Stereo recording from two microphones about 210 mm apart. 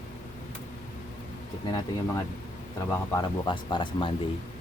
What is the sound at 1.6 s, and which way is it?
Speech, 20° left (ahead or behind).